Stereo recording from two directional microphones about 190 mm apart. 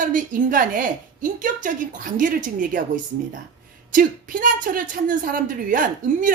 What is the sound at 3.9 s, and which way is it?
A woman's voice, 45° right (ahead or behind).